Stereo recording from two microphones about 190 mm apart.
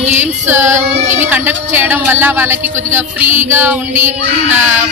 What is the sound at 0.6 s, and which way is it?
Female singing, 40° right (ahead or behind).